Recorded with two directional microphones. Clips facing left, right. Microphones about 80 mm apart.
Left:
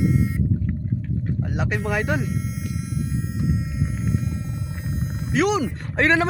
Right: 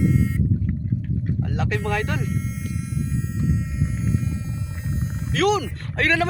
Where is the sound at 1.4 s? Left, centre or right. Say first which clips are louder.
Even; centre.